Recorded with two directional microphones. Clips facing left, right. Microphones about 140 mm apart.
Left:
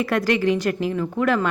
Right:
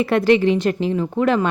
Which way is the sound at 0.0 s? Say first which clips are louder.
Right 5 dB; 25° right (ahead or behind).